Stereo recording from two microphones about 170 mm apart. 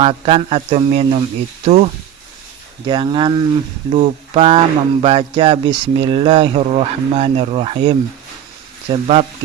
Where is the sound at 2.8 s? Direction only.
25° right (ahead or behind).